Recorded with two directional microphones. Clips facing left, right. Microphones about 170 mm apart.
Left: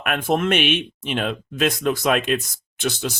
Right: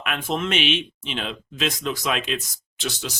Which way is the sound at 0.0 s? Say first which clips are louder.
Left 5 dB; 50° left (ahead or behind).